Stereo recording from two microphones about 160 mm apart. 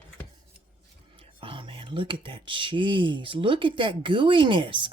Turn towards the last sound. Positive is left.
turn(degrees=-30)  # may be behind; listen again after turning